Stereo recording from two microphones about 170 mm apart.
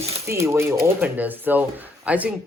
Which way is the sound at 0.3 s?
15° right (ahead or behind).